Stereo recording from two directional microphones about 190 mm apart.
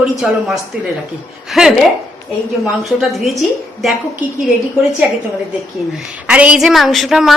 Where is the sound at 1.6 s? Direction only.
Centre (ahead or behind).